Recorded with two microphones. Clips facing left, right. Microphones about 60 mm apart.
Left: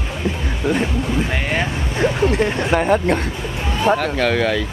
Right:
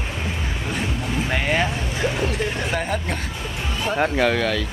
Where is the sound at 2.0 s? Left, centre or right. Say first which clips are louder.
Left 7 dB; left.